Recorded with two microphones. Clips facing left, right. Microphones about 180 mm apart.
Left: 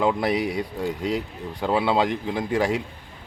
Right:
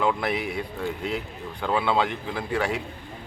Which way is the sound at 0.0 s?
30° left (ahead or behind).